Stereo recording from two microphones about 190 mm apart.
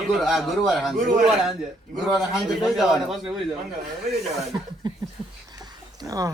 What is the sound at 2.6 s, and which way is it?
Speech, centre (ahead or behind).